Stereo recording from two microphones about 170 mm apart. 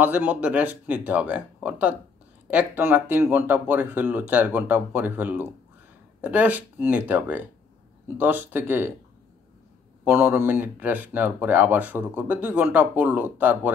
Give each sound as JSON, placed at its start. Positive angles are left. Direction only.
{"t": 0.0, "sound": "speech", "side_deg": -10}
{"t": 10.0, "sound": "speech", "side_deg": -10}